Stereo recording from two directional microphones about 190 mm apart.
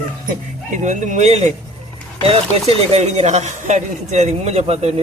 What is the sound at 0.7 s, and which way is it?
Speech, 40° right (ahead or behind).